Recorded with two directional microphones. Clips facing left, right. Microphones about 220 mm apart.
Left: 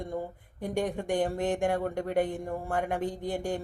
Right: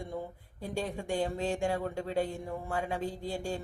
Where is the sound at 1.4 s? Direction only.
20° left (ahead or behind).